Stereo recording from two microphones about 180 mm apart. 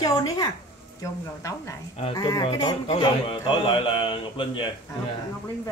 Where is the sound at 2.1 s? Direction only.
20° left (ahead or behind).